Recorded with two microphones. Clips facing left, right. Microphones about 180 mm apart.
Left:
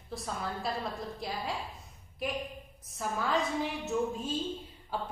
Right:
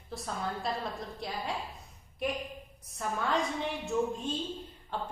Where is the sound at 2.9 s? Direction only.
Centre (ahead or behind).